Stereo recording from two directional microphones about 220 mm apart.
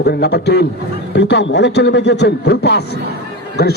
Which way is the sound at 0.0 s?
45° left (ahead or behind).